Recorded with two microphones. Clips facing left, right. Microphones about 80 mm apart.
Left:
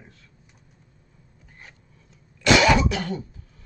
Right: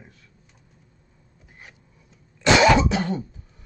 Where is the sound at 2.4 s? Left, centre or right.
Right.